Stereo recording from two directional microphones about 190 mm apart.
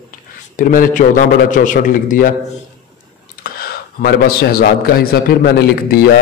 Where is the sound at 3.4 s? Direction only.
55° left (ahead or behind).